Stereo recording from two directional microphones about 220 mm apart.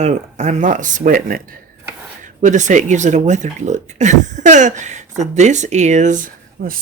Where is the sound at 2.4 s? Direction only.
35° right (ahead or behind).